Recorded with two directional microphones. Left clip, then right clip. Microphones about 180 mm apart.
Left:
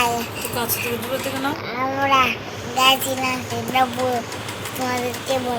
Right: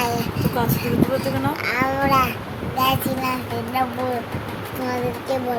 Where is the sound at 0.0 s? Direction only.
5° left (ahead or behind).